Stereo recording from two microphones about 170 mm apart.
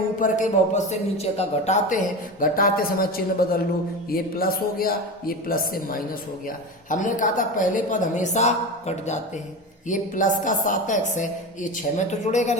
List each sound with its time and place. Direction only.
0.2 s speech: 45° left (ahead or behind)
2.4 s speech: 55° left (ahead or behind)